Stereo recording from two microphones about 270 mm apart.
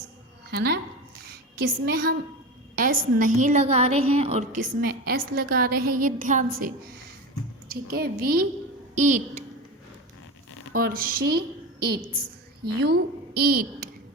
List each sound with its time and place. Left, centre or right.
0.5 s a woman's voice: right
8.2 s a woman's voice: right
10.8 s a woman's voice: right